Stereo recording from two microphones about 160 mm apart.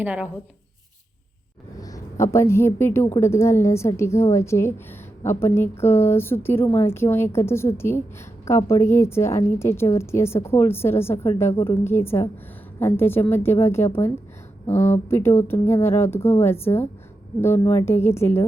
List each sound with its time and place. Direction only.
0.0 s speech: 10° right (ahead or behind)
1.8 s a woman's voice: 20° left (ahead or behind)